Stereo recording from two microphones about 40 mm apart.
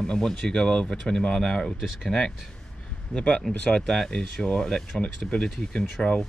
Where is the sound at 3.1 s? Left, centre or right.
Left.